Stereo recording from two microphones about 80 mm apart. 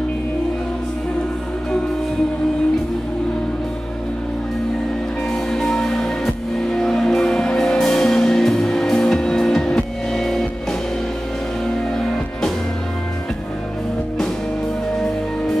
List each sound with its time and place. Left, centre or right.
5.3 s music: centre
12.0 s music: centre